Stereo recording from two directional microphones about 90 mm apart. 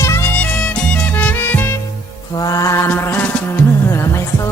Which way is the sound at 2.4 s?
40° left (ahead or behind).